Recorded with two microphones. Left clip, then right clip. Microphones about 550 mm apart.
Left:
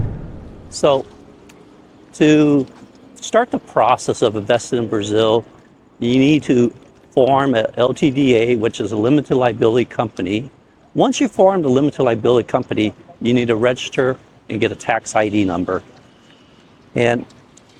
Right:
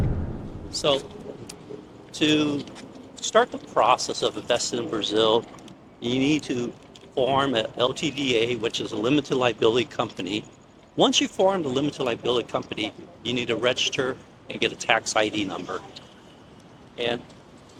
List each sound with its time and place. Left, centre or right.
0.7 s a man's voice: left
2.1 s speech: left
3.3 s speech: left
13.3 s speech: left